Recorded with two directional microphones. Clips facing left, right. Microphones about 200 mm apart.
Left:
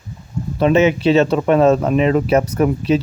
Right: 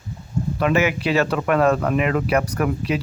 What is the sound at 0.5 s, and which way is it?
Speech, 25° left (ahead or behind).